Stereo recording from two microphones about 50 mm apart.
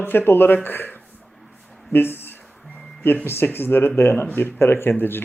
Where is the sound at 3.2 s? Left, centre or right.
Left.